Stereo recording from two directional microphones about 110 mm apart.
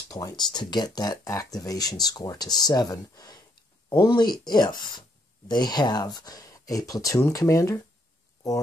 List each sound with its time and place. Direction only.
0.1 s speech: 40° left (ahead or behind)